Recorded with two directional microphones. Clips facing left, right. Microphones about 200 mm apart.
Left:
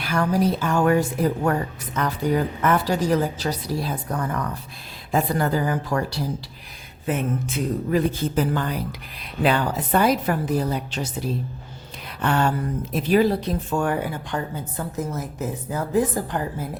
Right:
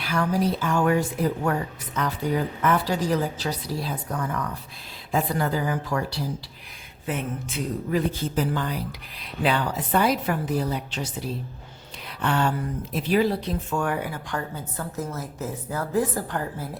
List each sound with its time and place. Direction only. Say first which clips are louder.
0.0 s a woman's voice: left 3 dB; 45° left (ahead or behind); by 16.6 s 15° left (ahead or behind)